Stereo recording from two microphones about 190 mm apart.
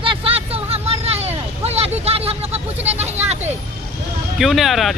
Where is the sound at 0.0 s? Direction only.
30° right (ahead or behind).